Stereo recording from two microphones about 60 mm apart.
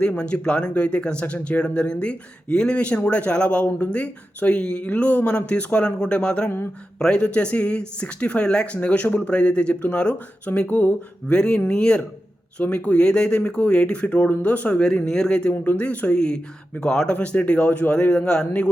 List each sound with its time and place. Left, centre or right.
0.0 s speech: centre
11.3 s speech: centre
15.0 s speech: centre
15.6 s speech: left